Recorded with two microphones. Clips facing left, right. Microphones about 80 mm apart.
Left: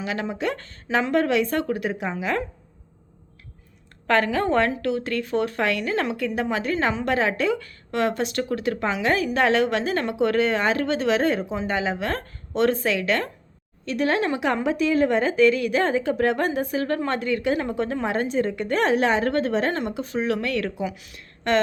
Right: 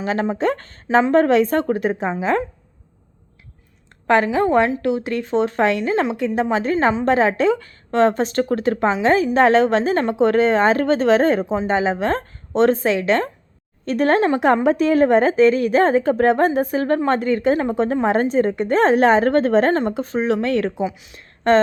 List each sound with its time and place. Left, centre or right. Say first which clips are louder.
0.0 s a woman's voice: right 7 dB; right
4.0 s a woman's voice: right 5 dB; centre
13.8 s a woman's voice: right 6 dB; right
21.5 s a woman's voice: right 7 dB; right